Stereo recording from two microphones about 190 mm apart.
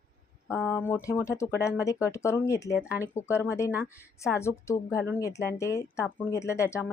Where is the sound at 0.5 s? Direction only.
10° left (ahead or behind).